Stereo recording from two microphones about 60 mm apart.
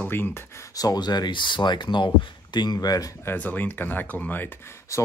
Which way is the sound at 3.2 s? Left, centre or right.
Left.